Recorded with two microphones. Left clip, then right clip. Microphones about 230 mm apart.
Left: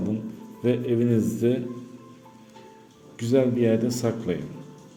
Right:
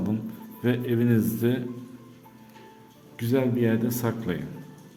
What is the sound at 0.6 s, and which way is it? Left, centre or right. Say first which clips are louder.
Speech: left 2 dB; centre.